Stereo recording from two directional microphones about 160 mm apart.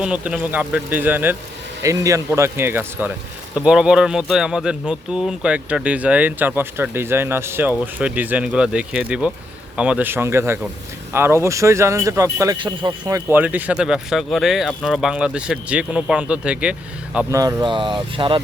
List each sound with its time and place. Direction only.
0.0 s a man's voice: 5° right (ahead or behind)
12.5 s speech: 30° right (ahead or behind)
13.4 s speech: 10° right (ahead or behind)
17.3 s speech: 20° right (ahead or behind)